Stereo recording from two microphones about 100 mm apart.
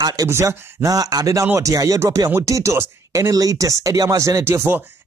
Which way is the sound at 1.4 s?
20° right (ahead or behind).